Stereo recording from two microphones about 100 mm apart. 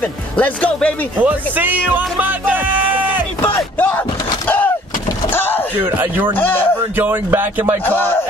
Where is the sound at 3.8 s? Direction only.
15° left (ahead or behind).